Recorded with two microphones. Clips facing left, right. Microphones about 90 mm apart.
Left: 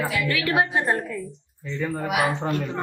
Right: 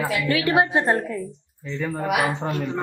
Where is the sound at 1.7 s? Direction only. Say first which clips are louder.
Even; 10° right (ahead or behind).